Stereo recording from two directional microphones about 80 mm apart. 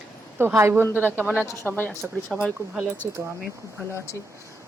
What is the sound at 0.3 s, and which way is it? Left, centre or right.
Speech, right.